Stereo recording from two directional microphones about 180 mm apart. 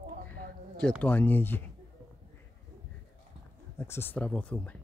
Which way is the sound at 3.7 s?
15° left (ahead or behind).